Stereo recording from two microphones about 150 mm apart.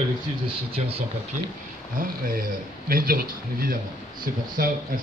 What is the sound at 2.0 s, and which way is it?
Speech, 70° right (ahead or behind).